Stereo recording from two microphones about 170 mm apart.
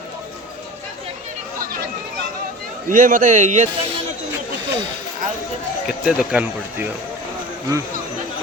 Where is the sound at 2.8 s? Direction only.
50° right (ahead or behind).